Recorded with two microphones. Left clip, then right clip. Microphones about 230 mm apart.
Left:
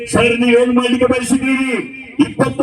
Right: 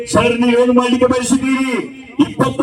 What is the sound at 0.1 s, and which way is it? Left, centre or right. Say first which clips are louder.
A man's voice: left 1 dB; centre.